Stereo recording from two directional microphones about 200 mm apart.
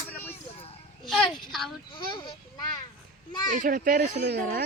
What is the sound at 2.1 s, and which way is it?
Speech, 25° left (ahead or behind).